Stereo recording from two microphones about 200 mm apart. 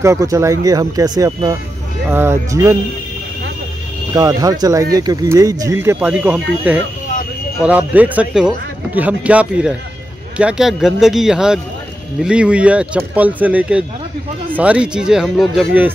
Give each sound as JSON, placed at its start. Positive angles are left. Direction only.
{"t": 0.0, "sound": "speech", "side_deg": -15}
{"t": 4.1, "sound": "speech", "side_deg": -15}